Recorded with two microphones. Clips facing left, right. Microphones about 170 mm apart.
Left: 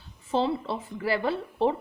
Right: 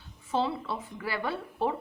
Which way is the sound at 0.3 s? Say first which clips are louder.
Left 3 dB; 30° left (ahead or behind).